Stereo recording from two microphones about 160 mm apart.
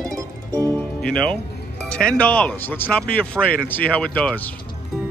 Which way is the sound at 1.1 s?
5° left (ahead or behind).